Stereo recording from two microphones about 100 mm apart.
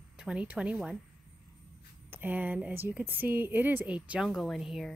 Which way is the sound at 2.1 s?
20° right (ahead or behind).